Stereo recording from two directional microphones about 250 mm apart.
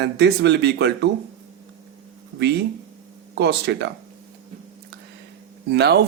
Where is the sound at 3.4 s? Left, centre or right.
Right.